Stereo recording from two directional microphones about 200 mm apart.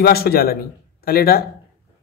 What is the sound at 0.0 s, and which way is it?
A man's voice, 50° left (ahead or behind).